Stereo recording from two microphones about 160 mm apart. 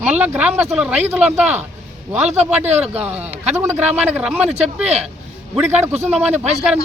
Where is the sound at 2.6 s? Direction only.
40° right (ahead or behind).